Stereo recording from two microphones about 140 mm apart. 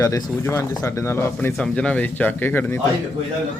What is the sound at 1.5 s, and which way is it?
Speech, 5° left (ahead or behind).